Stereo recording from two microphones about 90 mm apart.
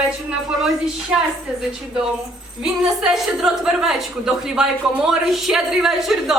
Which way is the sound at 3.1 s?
5° right (ahead or behind).